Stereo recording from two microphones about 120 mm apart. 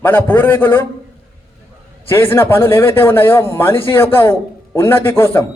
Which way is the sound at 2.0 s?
20° left (ahead or behind).